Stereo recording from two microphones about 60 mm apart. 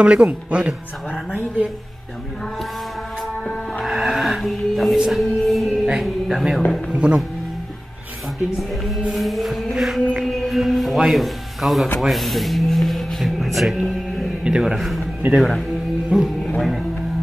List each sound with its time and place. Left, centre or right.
0.0 s speech: right
3.8 s music: centre
6.9 s speech: centre
8.5 s music: centre
9.8 s chant: centre
10.1 s music: centre
12.0 s a sound: centre
14.4 s a man's voice: centre
15.2 s speech: right
16.1 s speech: centre